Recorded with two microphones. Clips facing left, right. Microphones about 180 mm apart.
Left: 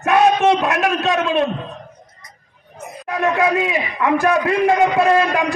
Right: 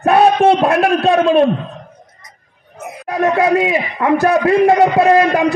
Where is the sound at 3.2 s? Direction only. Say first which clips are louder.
Right 4 dB; 35° right (ahead or behind).